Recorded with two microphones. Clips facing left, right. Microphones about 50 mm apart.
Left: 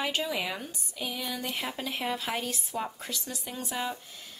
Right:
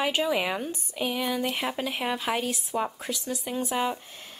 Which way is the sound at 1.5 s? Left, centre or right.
Centre.